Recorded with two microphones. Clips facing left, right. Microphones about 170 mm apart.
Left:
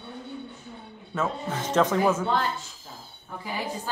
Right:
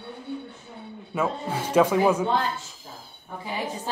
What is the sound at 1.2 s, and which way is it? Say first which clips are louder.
Speech: right 2 dB; 10° right (ahead or behind).